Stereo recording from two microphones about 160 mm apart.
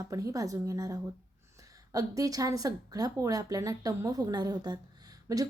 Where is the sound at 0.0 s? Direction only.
20° right (ahead or behind).